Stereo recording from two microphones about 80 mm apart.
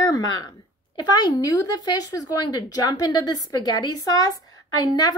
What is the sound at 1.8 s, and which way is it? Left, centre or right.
A woman's voice, left.